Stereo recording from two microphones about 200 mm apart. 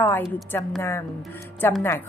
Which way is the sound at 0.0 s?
10° left (ahead or behind).